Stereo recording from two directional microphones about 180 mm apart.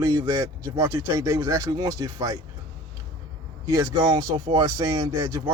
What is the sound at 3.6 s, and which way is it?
Speech, 20° right (ahead or behind).